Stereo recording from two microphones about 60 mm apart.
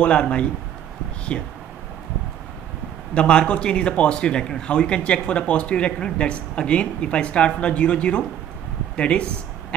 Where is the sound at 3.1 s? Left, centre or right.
Centre.